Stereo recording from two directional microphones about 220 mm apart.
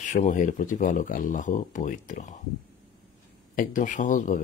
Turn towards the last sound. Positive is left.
turn(degrees=35)  # may be behind; listen again after turning